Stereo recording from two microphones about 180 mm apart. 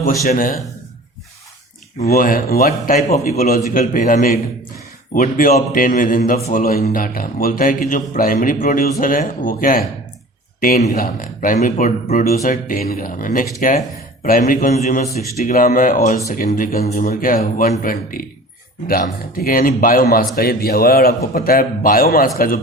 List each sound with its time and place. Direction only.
0.3 s a man's voice: 50° left (ahead or behind)
2.0 s a man's voice: 50° left (ahead or behind)